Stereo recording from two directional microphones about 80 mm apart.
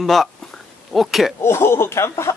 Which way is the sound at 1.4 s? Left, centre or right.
Left.